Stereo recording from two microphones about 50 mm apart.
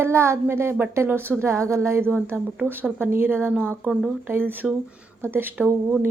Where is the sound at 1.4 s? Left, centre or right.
Right.